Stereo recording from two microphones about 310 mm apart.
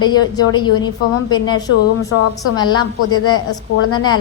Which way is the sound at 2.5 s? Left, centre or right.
Centre.